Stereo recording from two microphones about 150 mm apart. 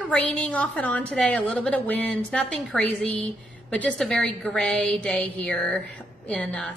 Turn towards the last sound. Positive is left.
turn(degrees=10)  # may be behind; listen again after turning